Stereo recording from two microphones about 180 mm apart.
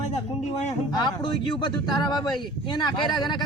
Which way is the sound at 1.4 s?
25° left (ahead or behind).